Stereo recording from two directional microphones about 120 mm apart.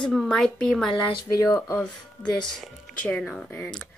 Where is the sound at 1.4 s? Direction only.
25° left (ahead or behind).